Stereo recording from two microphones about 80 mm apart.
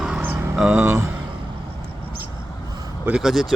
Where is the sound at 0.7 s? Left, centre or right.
Right.